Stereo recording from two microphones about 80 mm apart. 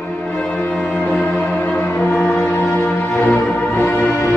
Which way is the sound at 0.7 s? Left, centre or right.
Centre.